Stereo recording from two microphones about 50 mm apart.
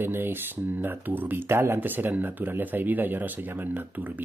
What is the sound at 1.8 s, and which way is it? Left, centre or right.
Speech, right.